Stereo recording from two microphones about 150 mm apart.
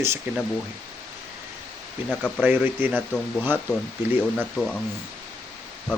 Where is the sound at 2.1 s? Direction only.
5° left (ahead or behind).